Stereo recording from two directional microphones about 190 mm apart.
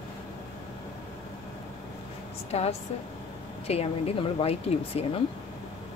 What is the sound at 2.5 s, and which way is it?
Speech, 35° left (ahead or behind).